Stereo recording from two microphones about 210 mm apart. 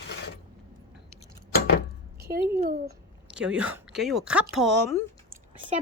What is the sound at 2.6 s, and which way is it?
Speech, 40° right (ahead or behind).